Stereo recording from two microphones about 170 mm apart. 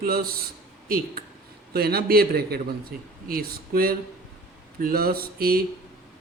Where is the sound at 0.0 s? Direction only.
60° right (ahead or behind).